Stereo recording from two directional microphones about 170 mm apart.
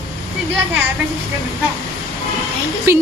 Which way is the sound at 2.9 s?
15° right (ahead or behind).